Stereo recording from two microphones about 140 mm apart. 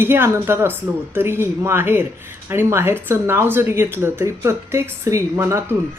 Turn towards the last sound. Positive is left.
turn(degrees=-15)  # may be behind; listen again after turning